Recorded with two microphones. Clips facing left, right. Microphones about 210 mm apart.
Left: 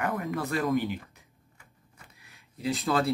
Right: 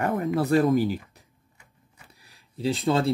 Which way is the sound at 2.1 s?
35° right (ahead or behind).